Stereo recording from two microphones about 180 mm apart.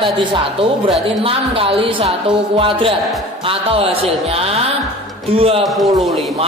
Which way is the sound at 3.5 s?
30° right (ahead or behind).